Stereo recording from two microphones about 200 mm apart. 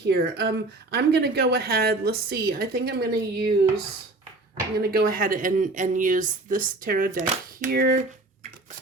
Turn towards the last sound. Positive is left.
turn(degrees=-50)  # may be behind; listen again after turning